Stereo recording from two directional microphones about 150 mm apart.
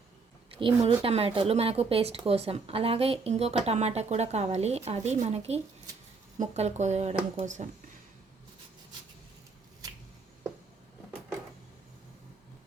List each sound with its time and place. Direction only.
0.5 s a woman's voice: 35° right (ahead or behind); by 7.7 s 55° right (ahead or behind)